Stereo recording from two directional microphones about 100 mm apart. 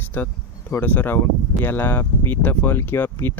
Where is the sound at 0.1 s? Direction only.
20° left (ahead or behind).